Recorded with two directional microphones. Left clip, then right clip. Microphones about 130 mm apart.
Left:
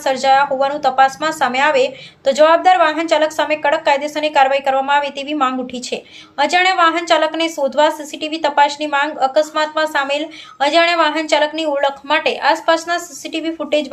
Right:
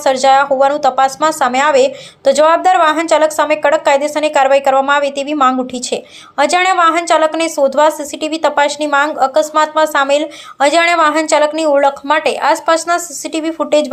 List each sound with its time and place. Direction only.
0.0 s a woman's voice: 35° right (ahead or behind)